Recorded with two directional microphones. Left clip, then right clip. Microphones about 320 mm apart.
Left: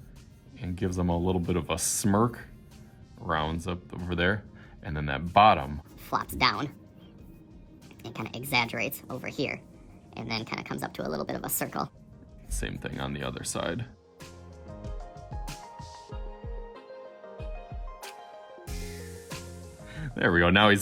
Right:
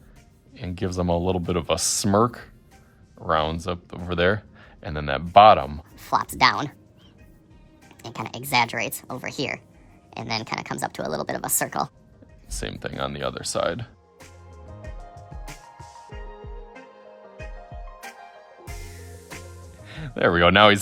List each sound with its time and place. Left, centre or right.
0.5 s speech: right
8.0 s speech: centre
18.8 s music: centre
19.9 s speech: right